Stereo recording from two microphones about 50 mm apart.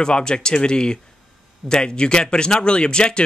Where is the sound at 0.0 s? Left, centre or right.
Centre.